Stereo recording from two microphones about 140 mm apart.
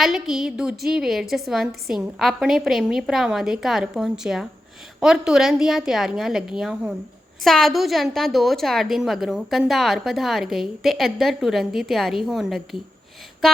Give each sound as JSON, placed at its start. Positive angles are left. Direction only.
{"t": 0.0, "sound": "a woman's voice", "side_deg": 0}